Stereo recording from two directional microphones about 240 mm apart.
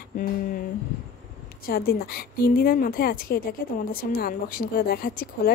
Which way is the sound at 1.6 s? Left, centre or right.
Left.